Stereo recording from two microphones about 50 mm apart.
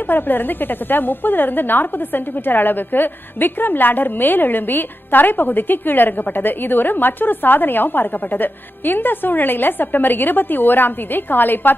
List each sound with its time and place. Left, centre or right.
0.1 s a woman's voice: left